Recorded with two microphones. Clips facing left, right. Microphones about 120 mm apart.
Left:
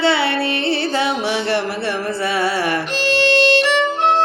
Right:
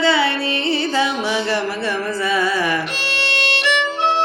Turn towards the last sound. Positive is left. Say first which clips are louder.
# left 3 dB
turn(degrees=40)  # may be behind; listen again after turning